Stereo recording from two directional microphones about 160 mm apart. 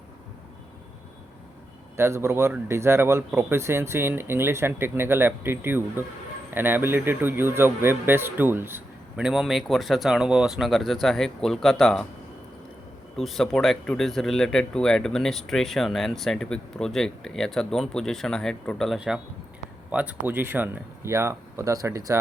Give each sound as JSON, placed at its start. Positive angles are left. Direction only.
{"t": 2.0, "sound": "speech", "side_deg": -15}
{"t": 13.1, "sound": "speech", "side_deg": 0}